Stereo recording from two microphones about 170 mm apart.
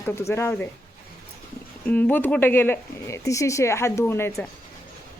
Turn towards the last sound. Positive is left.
turn(degrees=15)  # may be behind; listen again after turning